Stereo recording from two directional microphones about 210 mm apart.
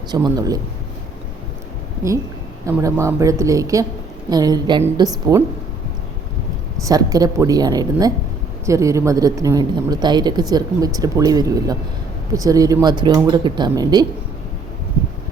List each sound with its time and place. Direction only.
0.1 s speech: 20° right (ahead or behind)
2.6 s speech: 15° right (ahead or behind)
6.8 s speech: 15° right (ahead or behind)